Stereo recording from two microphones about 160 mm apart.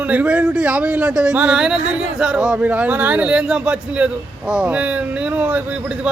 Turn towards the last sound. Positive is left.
turn(degrees=-10)  # may be behind; listen again after turning